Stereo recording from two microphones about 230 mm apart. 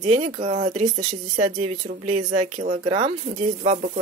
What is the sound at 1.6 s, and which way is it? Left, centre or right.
Speech, right.